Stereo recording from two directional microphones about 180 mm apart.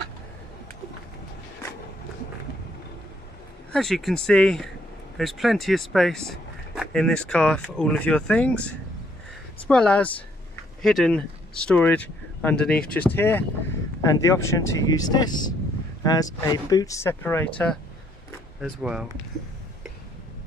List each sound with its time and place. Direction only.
3.7 s speech: centre (ahead or behind)
18.6 s speech: 5° right (ahead or behind)